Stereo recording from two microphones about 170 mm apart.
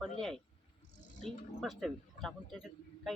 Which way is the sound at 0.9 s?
45° left (ahead or behind).